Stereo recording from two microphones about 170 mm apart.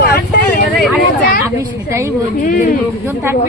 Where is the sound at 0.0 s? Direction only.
65° left (ahead or behind).